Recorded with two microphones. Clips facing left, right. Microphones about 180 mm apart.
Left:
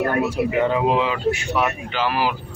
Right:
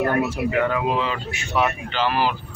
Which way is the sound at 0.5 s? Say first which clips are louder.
Left 2 dB; 20° left (ahead or behind).